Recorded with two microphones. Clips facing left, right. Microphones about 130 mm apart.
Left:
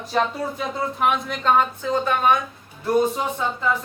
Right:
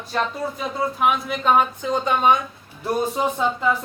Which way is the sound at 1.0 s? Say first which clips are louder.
Even; 5° right (ahead or behind).